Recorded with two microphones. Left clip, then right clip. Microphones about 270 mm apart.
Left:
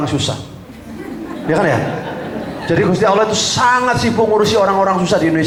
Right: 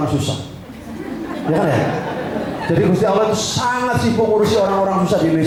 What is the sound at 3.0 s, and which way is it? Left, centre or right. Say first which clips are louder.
A man's voice: left 3 dB; centre.